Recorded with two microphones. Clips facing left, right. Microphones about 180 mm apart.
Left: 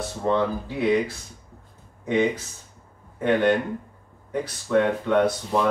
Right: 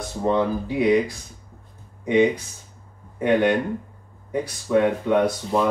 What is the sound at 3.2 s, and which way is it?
Speech, 10° right (ahead or behind).